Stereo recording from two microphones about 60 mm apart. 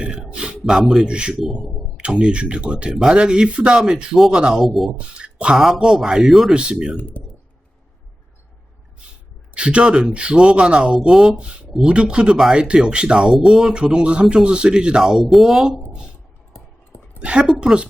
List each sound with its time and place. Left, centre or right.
0.0 s a sound: centre
0.6 s speech: centre
4.6 s speech: centre
4.9 s speech: centre
6.6 s speech: centre
6.9 s speech: left
9.6 s speech: centre
16.9 s a woman's voice: centre